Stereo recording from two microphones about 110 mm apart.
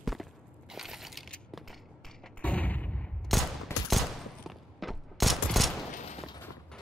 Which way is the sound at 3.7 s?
25° left (ahead or behind).